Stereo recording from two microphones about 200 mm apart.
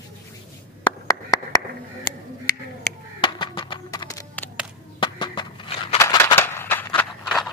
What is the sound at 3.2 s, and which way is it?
Music, 25° left (ahead or behind).